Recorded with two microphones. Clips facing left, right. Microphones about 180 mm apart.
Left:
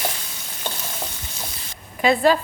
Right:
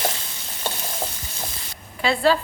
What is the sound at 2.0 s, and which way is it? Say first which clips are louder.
Speech: left 2 dB; 15° left (ahead or behind).